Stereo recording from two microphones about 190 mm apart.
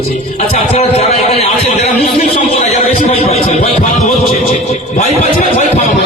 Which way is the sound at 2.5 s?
35° left (ahead or behind).